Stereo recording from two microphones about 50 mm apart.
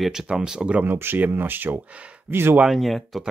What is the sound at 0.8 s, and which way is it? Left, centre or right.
Speech, right.